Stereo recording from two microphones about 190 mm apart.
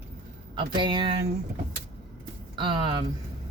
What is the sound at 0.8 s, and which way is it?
Speech, 25° right (ahead or behind).